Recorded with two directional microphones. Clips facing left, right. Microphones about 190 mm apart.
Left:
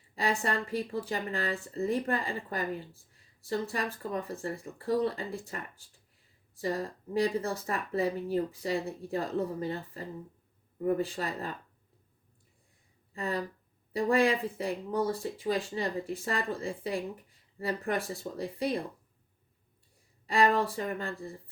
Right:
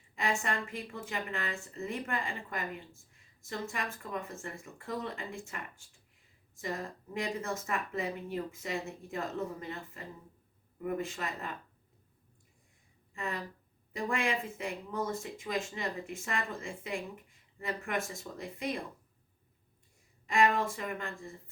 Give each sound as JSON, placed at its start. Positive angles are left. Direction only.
{"t": 0.2, "sound": "speech", "side_deg": 35}
{"t": 13.1, "sound": "speech", "side_deg": 35}
{"t": 20.2, "sound": "speech", "side_deg": 35}